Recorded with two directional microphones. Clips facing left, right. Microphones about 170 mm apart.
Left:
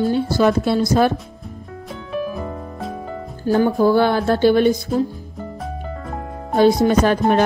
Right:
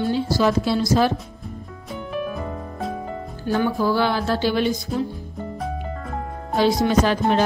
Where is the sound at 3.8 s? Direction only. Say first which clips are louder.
Left 5 dB; 50° left (ahead or behind).